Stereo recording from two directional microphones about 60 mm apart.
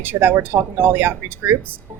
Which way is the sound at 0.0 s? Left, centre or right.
Right.